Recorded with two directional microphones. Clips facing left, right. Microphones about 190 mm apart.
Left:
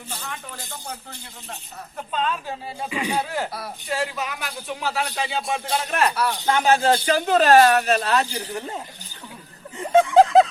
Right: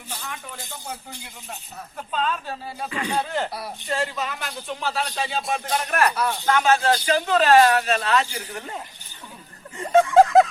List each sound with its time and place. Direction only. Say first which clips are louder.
0.1 s speech: even; centre (ahead or behind)
2.0 s speech: even; centre (ahead or behind)
2.5 s speech: left 1 dB; 15° left (ahead or behind)
6.1 s speech: left 1 dB; 5° left (ahead or behind)
6.7 s speech: left 3 dB; 35° left (ahead or behind)
9.8 s speech: even; 10° left (ahead or behind)